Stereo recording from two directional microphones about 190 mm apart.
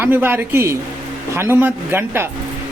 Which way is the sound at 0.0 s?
10° right (ahead or behind).